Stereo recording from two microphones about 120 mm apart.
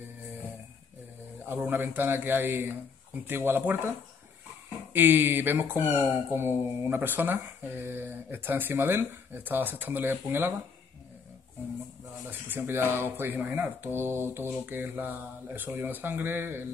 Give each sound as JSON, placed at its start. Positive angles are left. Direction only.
{"t": 1.5, "sound": "speech", "side_deg": -15}
{"t": 4.9, "sound": "speech", "side_deg": -15}
{"t": 12.3, "sound": "speech", "side_deg": -15}